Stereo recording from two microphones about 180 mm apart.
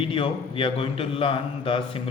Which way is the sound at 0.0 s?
30° left (ahead or behind).